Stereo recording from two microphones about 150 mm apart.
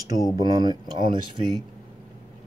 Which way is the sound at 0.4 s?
25° right (ahead or behind).